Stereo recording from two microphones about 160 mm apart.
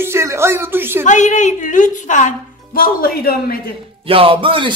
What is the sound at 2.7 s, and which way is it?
Speech, 65° left (ahead or behind).